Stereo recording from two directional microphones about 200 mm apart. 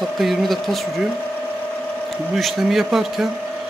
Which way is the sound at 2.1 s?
Centre (ahead or behind).